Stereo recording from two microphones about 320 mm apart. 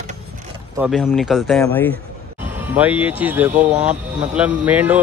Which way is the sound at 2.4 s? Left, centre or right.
Centre.